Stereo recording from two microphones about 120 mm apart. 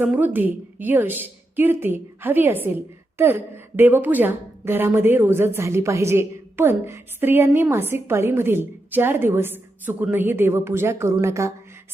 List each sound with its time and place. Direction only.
0.0 s a woman's voice: 15° right (ahead or behind)